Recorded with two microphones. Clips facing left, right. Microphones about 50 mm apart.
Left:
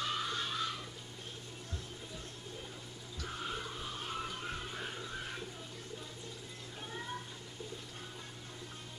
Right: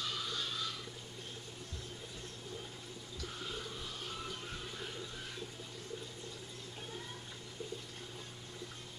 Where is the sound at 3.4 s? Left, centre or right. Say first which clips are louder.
Left 4 dB; left.